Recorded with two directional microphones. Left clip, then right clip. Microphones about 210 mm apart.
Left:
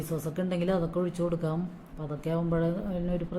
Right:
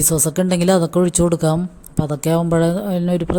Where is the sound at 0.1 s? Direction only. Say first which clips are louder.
Right 9 dB; 45° right (ahead or behind).